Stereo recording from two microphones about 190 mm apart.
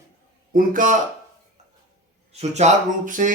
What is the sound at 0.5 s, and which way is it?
Speech, 45° right (ahead or behind).